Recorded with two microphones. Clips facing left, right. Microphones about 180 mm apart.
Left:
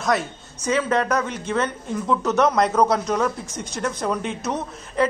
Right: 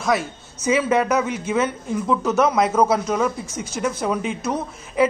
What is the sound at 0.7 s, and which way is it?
A man's voice, 10° right (ahead or behind).